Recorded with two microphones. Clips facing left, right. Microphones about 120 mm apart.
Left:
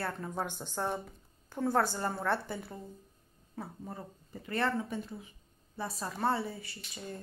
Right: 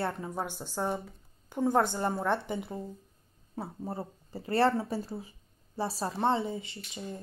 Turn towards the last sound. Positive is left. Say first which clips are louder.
# right 3 dB
turn(degrees=-20)  # may be behind; listen again after turning